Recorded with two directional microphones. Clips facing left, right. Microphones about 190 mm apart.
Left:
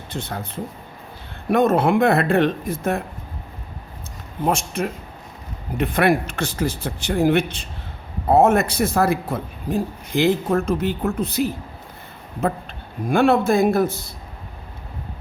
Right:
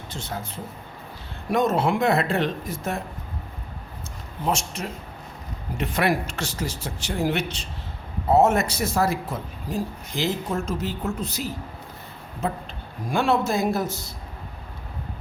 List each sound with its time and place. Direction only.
0.1 s a man's voice: 60° left (ahead or behind)
1.5 s a man's voice: 55° left (ahead or behind)
4.4 s a man's voice: 55° left (ahead or behind)